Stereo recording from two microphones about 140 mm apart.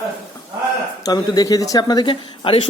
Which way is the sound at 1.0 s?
25° left (ahead or behind).